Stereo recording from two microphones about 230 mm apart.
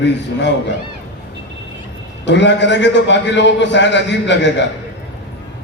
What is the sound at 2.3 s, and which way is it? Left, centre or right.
A man's voice, left.